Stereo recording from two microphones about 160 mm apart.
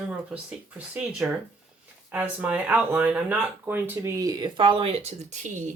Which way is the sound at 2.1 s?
10° right (ahead or behind).